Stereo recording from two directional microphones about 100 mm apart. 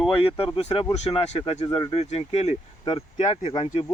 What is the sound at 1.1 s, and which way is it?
Speech, 65° left (ahead or behind).